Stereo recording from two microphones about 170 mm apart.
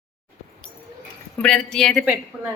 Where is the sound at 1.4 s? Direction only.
5° left (ahead or behind).